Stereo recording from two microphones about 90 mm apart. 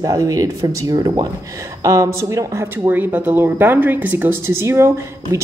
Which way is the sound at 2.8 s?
20° right (ahead or behind).